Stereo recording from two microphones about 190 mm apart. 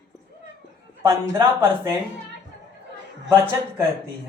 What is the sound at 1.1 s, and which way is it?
Speech, 10° right (ahead or behind).